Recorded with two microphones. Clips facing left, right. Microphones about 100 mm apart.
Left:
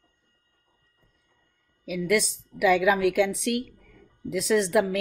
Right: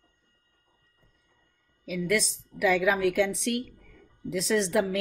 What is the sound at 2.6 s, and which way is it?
Speech, 65° left (ahead or behind).